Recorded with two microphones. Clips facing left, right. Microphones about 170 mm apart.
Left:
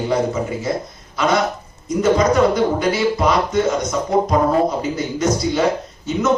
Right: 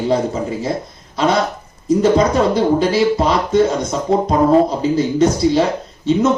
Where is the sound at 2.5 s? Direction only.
30° right (ahead or behind).